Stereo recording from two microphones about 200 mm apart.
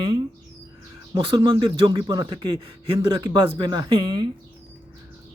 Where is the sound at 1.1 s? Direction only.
25° right (ahead or behind).